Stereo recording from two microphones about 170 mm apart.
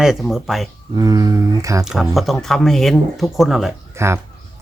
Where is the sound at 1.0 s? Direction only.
20° right (ahead or behind).